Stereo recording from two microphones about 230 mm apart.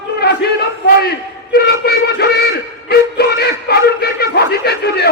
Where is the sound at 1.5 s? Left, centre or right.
Left.